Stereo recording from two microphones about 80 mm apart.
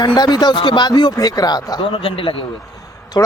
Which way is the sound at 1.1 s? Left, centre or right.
Left.